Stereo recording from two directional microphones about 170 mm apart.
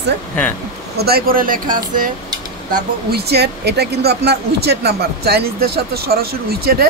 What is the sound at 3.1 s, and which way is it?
Speech, 70° right (ahead or behind).